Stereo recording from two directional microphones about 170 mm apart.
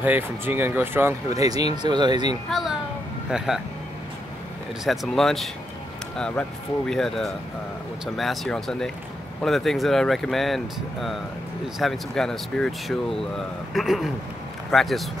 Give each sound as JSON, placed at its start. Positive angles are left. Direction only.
{"t": 0.0, "sound": "speech", "side_deg": -10}
{"t": 3.3, "sound": "speech", "side_deg": -5}
{"t": 4.8, "sound": "speech", "side_deg": 0}